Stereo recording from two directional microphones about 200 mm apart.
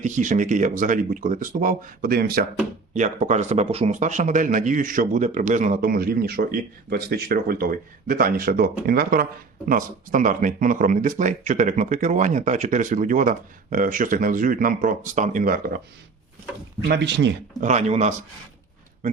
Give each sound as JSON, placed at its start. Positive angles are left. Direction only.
{"t": 0.0, "sound": "speech", "side_deg": -40}
{"t": 2.9, "sound": "a man's voice", "side_deg": -35}
{"t": 16.9, "sound": "a man's voice", "side_deg": -60}
{"t": 17.6, "sound": "speech", "side_deg": -35}